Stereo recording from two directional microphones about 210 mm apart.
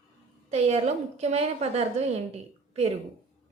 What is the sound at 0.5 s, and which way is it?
A woman's voice, 30° right (ahead or behind).